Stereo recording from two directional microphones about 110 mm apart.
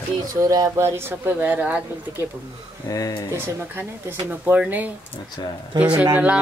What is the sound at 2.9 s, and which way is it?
Speech, 35° left (ahead or behind).